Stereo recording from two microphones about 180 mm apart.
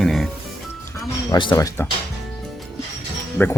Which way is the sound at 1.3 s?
25° left (ahead or behind).